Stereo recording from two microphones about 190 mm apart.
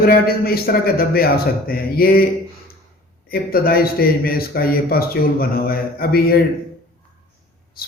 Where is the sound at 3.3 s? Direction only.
50° left (ahead or behind).